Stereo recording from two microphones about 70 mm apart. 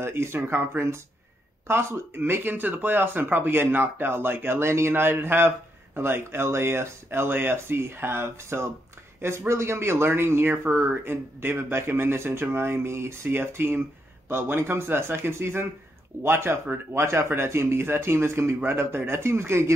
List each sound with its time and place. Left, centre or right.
0.0 s speech: right